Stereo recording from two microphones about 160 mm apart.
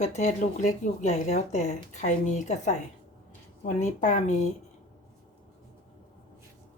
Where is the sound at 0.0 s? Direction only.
45° left (ahead or behind).